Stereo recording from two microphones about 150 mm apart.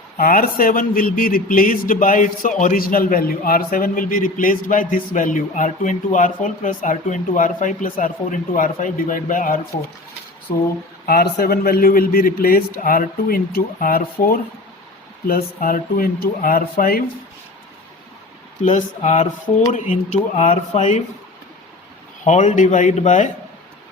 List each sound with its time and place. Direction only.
0.2 s a man's voice: 70° left (ahead or behind)
11.0 s a man's voice: 90° left; by 17.0 s 70° left (ahead or behind)
18.6 s speech: 50° left (ahead or behind)
22.2 s speech: 50° left (ahead or behind)